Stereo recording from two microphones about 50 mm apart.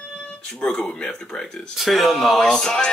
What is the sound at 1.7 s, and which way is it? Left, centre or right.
Speech, centre.